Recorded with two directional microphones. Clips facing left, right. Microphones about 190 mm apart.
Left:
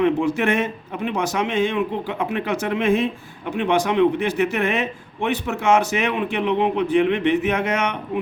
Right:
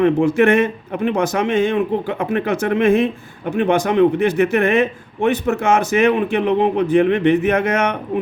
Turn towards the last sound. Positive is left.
turn(degrees=-50)  # may be behind; listen again after turning